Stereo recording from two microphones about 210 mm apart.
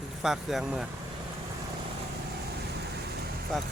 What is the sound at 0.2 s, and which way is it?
Speech, centre (ahead or behind).